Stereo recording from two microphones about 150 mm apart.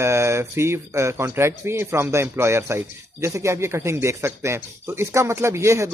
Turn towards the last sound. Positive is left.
turn(degrees=-20)  # may be behind; listen again after turning